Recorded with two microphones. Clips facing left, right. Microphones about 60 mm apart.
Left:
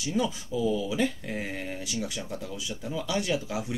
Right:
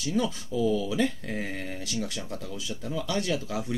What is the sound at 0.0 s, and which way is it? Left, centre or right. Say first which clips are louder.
Speech: even; centre.